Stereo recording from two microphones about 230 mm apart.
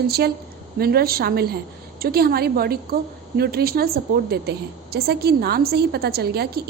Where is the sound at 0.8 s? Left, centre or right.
Right.